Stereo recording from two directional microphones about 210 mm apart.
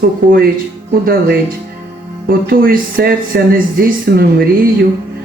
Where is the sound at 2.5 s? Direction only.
45° right (ahead or behind).